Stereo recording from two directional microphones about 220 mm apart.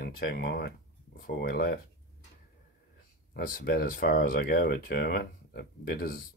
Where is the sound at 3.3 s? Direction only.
40° left (ahead or behind).